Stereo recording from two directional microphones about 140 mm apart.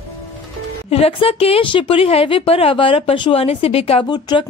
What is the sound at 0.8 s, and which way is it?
A woman's voice, 45° left (ahead or behind).